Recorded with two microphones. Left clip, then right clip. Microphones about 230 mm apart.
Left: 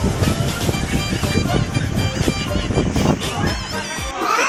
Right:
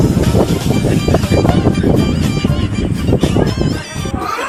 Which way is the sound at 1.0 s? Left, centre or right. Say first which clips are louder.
Right 8 dB; centre.